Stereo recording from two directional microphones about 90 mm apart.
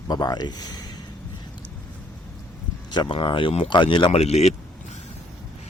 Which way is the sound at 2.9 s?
60° left (ahead or behind).